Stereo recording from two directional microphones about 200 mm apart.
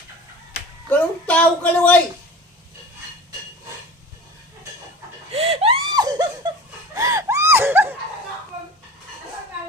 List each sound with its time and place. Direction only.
0.9 s a child's voice: 5° left (ahead or behind)
5.3 s laughter: 30° right (ahead or behind)
6.9 s wheeze: 15° right (ahead or behind)